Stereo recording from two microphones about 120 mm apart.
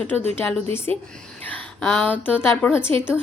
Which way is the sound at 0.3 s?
20° left (ahead or behind).